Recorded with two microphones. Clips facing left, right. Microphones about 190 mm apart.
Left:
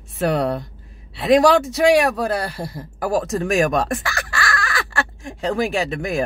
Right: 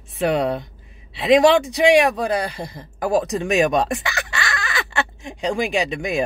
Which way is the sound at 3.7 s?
Centre (ahead or behind).